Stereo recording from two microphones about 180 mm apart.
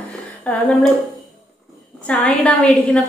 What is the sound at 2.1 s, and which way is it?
Speech, 5° left (ahead or behind).